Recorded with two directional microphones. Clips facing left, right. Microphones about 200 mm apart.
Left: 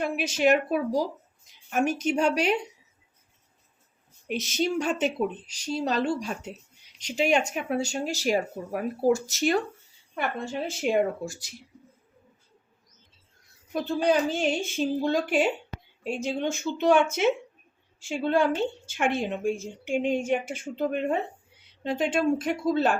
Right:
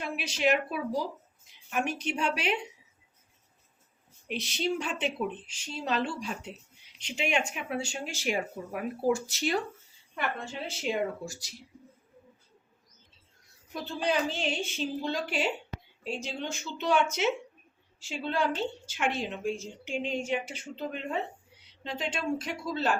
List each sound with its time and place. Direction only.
0.0 s a woman's voice: 45° left (ahead or behind)
4.3 s a woman's voice: 45° left (ahead or behind)
10.7 s a woman's voice: 55° left (ahead or behind)
13.7 s a woman's voice: 45° left (ahead or behind)